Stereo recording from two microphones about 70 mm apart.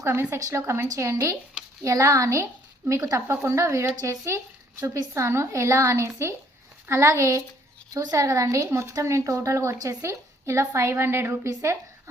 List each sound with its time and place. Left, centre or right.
0.0 s a woman's voice: right
0.3 s speech: right
0.6 s a woman's voice: right